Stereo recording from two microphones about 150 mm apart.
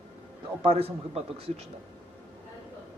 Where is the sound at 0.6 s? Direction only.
40° right (ahead or behind).